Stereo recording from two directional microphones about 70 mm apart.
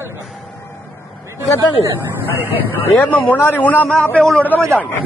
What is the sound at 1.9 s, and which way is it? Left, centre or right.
Speech, right.